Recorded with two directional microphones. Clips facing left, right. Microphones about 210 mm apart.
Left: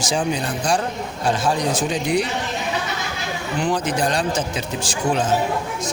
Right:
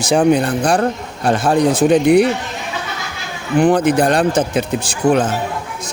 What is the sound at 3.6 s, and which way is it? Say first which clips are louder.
Speech: right 9 dB; 55° right (ahead or behind).